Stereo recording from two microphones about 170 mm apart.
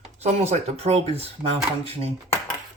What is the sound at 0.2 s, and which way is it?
Speech, 40° right (ahead or behind).